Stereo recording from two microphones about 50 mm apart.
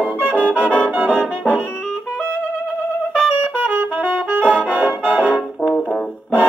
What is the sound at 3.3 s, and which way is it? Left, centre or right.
Brass instrument, right.